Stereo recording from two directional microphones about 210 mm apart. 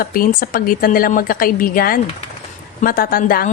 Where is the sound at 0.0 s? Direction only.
45° left (ahead or behind).